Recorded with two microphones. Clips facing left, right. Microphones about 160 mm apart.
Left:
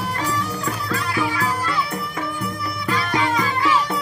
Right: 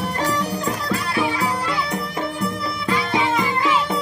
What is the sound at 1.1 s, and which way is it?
Music, 30° right (ahead or behind).